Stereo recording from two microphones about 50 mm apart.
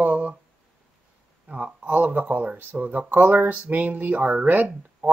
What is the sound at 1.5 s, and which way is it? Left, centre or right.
Speech, right.